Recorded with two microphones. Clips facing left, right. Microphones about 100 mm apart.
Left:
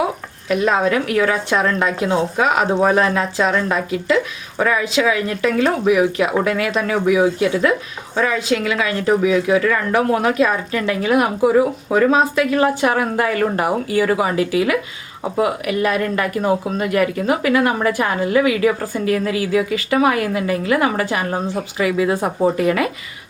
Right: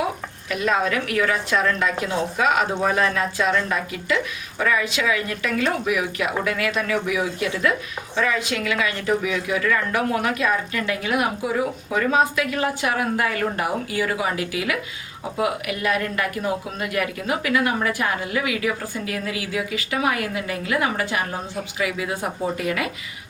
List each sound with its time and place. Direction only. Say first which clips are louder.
0.5 s a woman's voice: left 6 dB; 30° left (ahead or behind)